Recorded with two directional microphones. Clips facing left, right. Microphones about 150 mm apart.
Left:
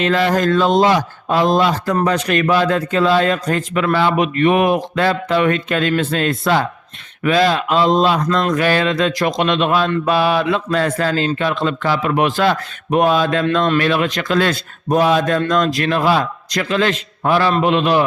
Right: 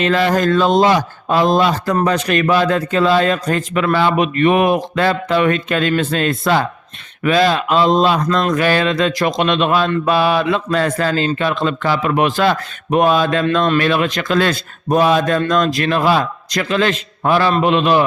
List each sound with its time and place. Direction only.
0.0 s speech: 30° right (ahead or behind)